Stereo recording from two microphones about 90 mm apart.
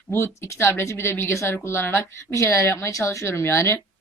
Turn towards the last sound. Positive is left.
turn(degrees=30)  # may be behind; listen again after turning